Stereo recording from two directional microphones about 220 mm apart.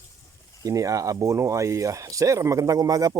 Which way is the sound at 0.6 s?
15° right (ahead or behind).